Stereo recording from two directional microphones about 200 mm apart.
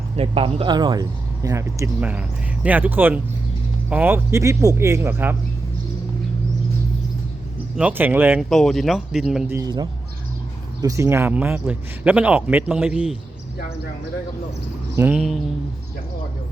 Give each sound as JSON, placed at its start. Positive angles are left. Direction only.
{"t": 0.2, "sound": "speech", "side_deg": -25}
{"t": 7.8, "sound": "speech", "side_deg": -10}
{"t": 9.6, "sound": "speech", "side_deg": -20}
{"t": 14.9, "sound": "speech", "side_deg": -10}